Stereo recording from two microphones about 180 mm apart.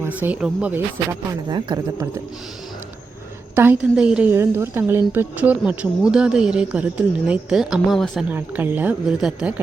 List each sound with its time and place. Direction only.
0.0 s a woman's voice: 10° right (ahead or behind)
1.3 s speech: 25° right (ahead or behind)
3.5 s a woman's voice: 10° right (ahead or behind)
8.3 s a woman's voice: 10° right (ahead or behind)